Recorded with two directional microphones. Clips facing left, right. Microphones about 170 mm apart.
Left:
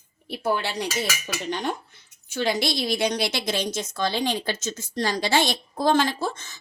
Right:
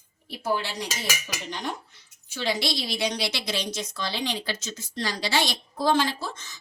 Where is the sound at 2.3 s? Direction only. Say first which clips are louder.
Left 3 dB; 50° left (ahead or behind).